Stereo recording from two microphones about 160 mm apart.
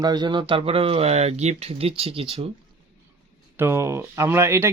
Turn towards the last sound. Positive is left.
turn(degrees=-15)  # may be behind; listen again after turning